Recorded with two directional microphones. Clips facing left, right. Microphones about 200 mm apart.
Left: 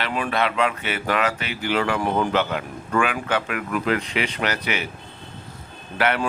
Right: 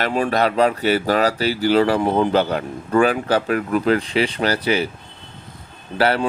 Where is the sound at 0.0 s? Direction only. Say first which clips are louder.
Right 5 dB; 40° right (ahead or behind).